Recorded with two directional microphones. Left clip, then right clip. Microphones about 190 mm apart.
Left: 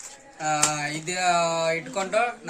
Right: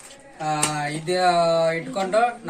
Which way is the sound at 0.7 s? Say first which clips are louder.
Right 4 dB; 15° left (ahead or behind).